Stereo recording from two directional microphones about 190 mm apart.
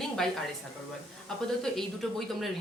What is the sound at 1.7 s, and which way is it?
Speech, centre (ahead or behind).